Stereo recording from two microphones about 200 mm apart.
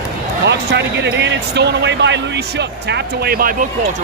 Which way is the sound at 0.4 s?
60° right (ahead or behind).